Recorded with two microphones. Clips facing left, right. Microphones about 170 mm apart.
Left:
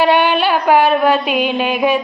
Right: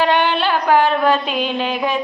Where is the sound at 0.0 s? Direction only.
10° left (ahead or behind).